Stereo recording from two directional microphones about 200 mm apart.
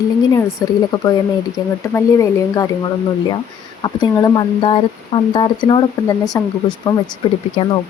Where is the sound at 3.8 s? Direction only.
20° left (ahead or behind).